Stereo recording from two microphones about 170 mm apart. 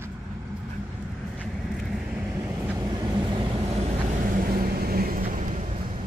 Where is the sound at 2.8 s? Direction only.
25° right (ahead or behind); by 5.8 s 45° right (ahead or behind).